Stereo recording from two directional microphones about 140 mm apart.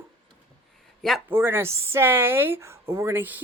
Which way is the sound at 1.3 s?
15° right (ahead or behind).